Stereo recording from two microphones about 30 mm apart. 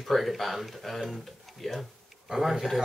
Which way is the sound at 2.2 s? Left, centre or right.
Centre.